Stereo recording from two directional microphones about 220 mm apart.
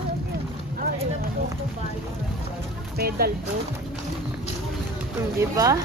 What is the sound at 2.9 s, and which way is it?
Speech, 45° right (ahead or behind).